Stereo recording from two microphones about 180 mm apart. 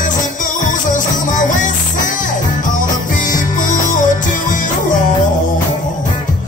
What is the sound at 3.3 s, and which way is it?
Music, 45° left (ahead or behind).